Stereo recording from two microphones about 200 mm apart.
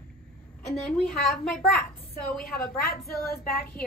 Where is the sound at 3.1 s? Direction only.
50° left (ahead or behind).